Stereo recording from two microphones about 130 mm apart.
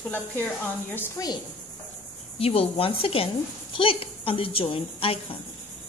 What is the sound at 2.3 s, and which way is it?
Speech, 50° left (ahead or behind).